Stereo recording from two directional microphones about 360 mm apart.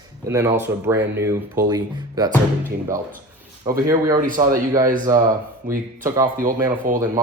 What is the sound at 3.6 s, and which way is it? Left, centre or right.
Speech, centre.